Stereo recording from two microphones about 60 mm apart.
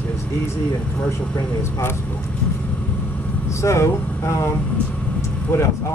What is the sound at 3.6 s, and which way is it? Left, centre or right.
Speech, left.